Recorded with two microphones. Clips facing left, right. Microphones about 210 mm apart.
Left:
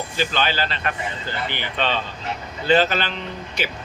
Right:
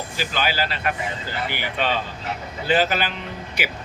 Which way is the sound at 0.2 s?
10° right (ahead or behind).